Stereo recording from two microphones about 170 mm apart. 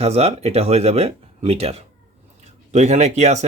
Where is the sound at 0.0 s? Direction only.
40° right (ahead or behind).